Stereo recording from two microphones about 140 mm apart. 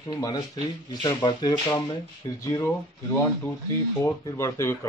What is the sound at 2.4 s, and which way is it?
Speech, 20° left (ahead or behind).